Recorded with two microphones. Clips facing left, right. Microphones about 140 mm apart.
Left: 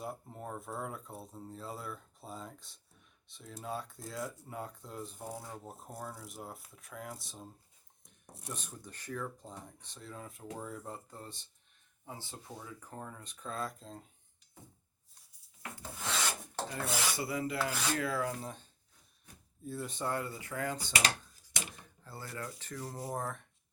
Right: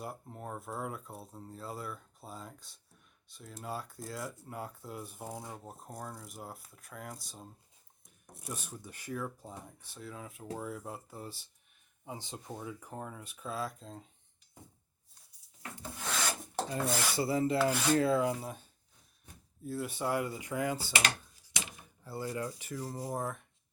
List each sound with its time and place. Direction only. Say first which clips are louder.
0.0 s speech: even; centre (ahead or behind)
5.5 s speech: even; centre (ahead or behind)
12.0 s speech: right 3 dB; 20° right (ahead or behind); by 14.1 s centre (ahead or behind)
16.8 s speech: right 2 dB; 5° left (ahead or behind)
17.2 s rub: right 6 dB; 30° right (ahead or behind)
18.4 s speech: right 2 dB; 10° right (ahead or behind)
21.0 s typewriter: even; 45° left (ahead or behind)
22.0 s speech: right 7 dB; 15° right (ahead or behind)